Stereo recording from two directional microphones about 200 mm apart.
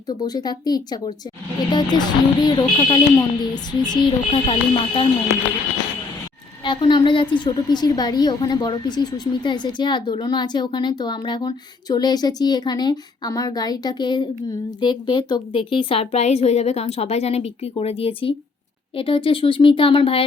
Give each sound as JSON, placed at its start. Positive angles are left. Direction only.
{"t": 0.1, "sound": "a woman's voice", "side_deg": 20}
{"t": 6.7, "sound": "a woman's voice", "side_deg": 25}